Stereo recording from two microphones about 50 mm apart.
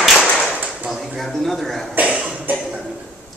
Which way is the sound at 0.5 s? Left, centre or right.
Right.